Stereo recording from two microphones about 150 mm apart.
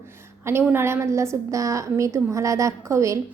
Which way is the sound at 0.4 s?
15° right (ahead or behind).